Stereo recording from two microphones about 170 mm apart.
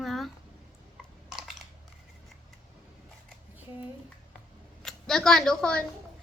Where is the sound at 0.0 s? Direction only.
Centre (ahead or behind).